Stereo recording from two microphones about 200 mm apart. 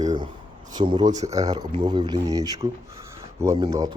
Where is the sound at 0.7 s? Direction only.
20° right (ahead or behind).